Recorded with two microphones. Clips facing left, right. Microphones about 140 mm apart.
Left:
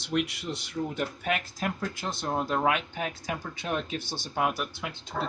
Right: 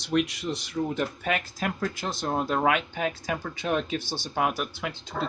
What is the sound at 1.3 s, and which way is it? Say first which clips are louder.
Speech: right 1 dB; 90° right.